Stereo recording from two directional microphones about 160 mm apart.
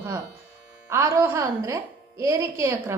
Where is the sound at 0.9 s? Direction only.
20° right (ahead or behind).